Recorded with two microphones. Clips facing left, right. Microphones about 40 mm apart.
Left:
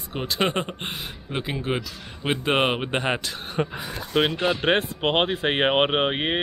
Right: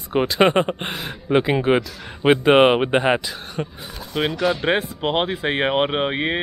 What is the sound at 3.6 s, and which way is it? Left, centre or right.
Speech, centre.